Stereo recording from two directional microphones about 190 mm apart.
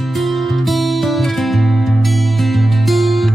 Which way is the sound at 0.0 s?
Centre (ahead or behind).